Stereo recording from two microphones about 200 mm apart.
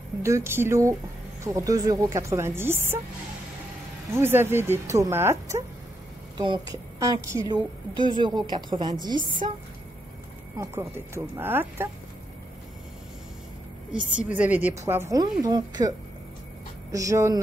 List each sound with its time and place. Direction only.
0.2 s speech: 15° right (ahead or behind)
4.1 s a woman's voice: 10° right (ahead or behind); by 9.6 s 30° right (ahead or behind)
10.6 s speech: 15° right (ahead or behind)
13.9 s speech: 5° right (ahead or behind)
16.9 s speech: 15° right (ahead or behind)